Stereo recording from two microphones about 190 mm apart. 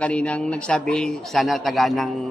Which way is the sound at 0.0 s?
5° left (ahead or behind).